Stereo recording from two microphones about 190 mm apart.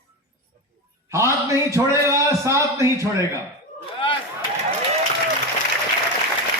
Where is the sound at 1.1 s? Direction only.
15° right (ahead or behind).